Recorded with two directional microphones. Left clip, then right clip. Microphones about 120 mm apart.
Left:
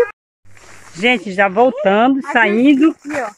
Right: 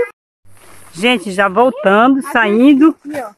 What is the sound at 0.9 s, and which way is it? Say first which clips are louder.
Speech: right 1 dB; 30° right (ahead or behind).